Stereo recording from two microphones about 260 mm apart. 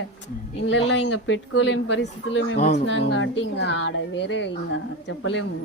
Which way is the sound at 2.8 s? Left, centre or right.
Left.